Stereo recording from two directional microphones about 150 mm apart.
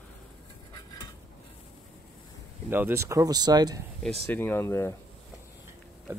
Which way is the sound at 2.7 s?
15° right (ahead or behind).